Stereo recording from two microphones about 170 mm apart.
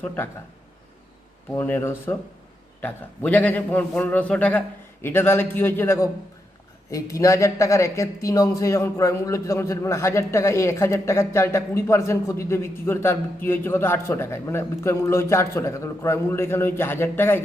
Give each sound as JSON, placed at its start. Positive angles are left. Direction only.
{"t": 1.5, "sound": "speech", "side_deg": 10}